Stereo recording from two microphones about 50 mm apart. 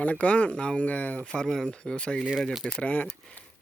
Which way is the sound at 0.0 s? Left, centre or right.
Left.